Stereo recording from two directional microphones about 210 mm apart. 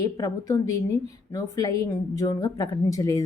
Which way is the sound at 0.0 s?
15° left (ahead or behind).